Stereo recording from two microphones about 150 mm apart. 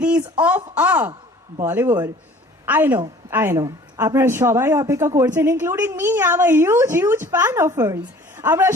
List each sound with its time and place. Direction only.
0.0 s a woman's voice: 10° right (ahead or behind)